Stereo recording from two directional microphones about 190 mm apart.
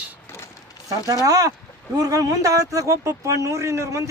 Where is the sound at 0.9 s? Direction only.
20° right (ahead or behind).